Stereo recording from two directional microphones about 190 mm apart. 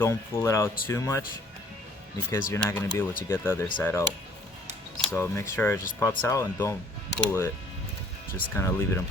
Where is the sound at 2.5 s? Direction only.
15° left (ahead or behind).